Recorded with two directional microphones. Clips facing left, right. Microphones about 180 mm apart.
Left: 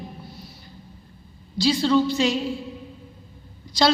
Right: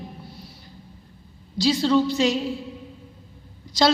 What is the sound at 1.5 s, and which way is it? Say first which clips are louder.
Speech: even; 40° right (ahead or behind).